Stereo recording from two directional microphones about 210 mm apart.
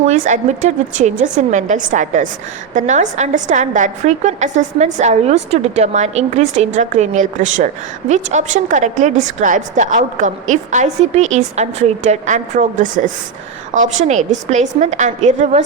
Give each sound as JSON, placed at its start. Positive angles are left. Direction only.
{"t": 0.0, "sound": "a woman's voice", "side_deg": -35}